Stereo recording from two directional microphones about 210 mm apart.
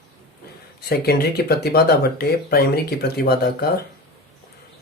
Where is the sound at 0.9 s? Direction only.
50° left (ahead or behind).